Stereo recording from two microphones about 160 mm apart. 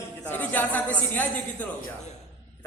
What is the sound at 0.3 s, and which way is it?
Speech, 10° left (ahead or behind).